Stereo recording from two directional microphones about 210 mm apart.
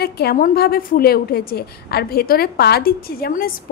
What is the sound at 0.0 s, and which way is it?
A woman's voice, 50° left (ahead or behind).